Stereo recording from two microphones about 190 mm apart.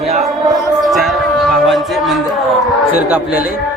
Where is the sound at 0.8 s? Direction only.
Centre (ahead or behind).